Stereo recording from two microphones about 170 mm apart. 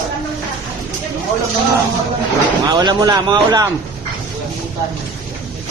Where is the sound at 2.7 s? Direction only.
25° right (ahead or behind).